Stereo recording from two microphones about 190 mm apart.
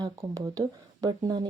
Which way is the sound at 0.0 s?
15° right (ahead or behind).